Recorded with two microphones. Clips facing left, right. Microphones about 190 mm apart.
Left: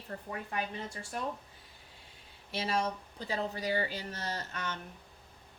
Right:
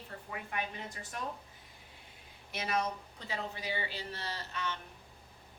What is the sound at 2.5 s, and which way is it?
Speech, 30° left (ahead or behind).